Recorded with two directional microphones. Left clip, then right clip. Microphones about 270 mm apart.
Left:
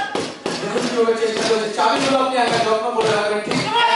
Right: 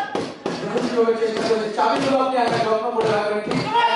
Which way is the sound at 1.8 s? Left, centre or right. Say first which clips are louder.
Left 2 dB; centre.